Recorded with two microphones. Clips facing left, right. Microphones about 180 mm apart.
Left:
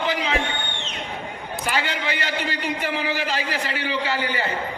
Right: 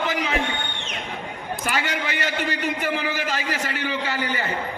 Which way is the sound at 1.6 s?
45° right (ahead or behind).